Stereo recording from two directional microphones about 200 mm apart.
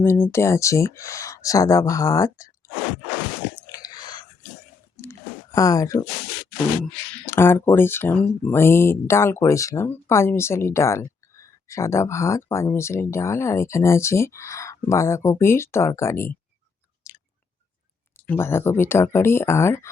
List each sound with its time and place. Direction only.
0.0 s speech: 10° left (ahead or behind)
3.7 s a sound: 20° left (ahead or behind)
7.3 s speech: 10° left (ahead or behind)
17.0 s chewing: 15° left (ahead or behind)
18.3 s speech: 10° left (ahead or behind)